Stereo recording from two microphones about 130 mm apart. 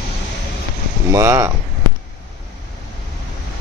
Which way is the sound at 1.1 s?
25° right (ahead or behind).